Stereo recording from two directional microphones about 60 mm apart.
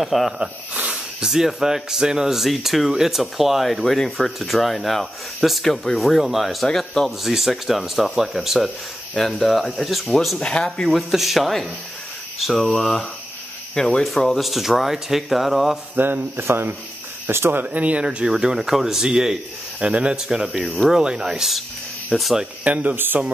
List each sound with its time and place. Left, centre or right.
0.0 s speech: centre
0.4 s speech: centre
10.4 s speech: centre
10.8 s speech: centre
16.0 s speech: right
17.6 s speech: right
18.0 s speech: centre
20.4 s speech: centre
21.0 s speech: centre
22.4 s speech: right